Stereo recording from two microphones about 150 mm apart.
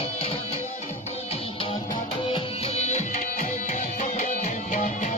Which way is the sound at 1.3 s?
40° left (ahead or behind).